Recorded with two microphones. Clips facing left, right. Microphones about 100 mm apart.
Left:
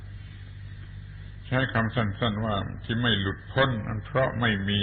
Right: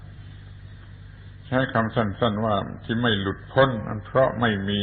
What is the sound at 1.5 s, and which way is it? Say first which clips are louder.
A man's voice: right 4 dB; 30° right (ahead or behind).